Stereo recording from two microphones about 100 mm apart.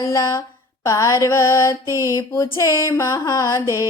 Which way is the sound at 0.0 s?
30° left (ahead or behind).